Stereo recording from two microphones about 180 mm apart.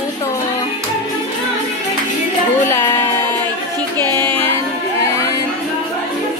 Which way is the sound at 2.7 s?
15° left (ahead or behind).